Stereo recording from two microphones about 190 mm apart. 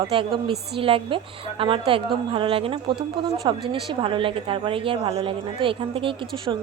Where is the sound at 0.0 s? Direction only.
25° right (ahead or behind).